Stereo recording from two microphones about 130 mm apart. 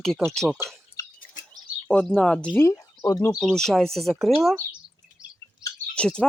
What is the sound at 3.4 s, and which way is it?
Speech, 5° left (ahead or behind).